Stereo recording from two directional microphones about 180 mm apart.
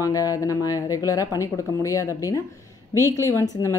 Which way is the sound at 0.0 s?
20° left (ahead or behind).